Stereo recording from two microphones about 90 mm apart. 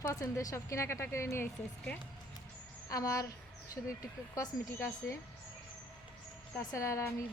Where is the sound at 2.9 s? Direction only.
40° left (ahead or behind).